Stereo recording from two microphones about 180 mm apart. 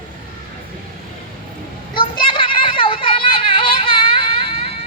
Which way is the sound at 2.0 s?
30° left (ahead or behind).